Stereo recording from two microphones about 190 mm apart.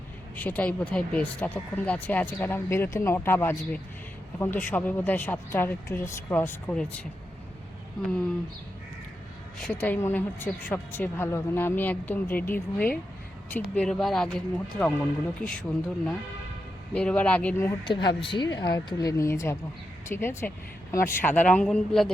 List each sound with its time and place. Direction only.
0.3 s speech: 10° left (ahead or behind)
9.6 s speech: 5° left (ahead or behind)
16.9 s speech: 5° left (ahead or behind)
17.8 s speech: 25° left (ahead or behind); by 22.1 s 5° left (ahead or behind)